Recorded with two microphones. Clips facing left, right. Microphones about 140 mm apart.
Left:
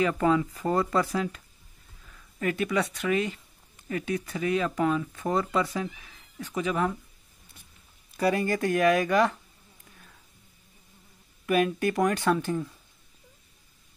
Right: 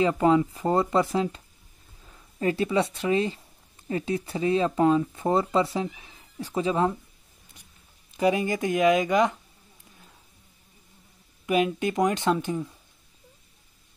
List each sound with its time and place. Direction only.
0.0 s speech: 25° right (ahead or behind)
8.1 s speech: 20° right (ahead or behind)
11.4 s speech: 20° right (ahead or behind)